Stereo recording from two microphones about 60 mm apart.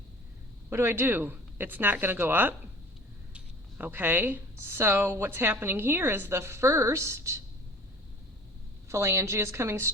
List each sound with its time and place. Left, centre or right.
0.7 s a woman's voice: right
3.8 s a woman's voice: right
8.9 s a woman's voice: right